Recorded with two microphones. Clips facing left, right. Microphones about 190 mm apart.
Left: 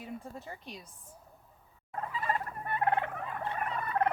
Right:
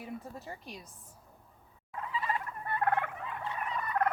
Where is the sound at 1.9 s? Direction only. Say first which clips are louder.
Left 1 dB; 45° left (ahead or behind).